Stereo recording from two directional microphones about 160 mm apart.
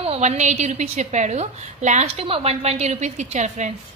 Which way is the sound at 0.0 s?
40° right (ahead or behind).